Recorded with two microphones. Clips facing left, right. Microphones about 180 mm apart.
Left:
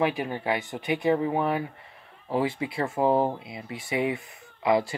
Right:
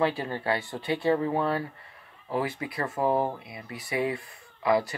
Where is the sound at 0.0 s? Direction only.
15° left (ahead or behind).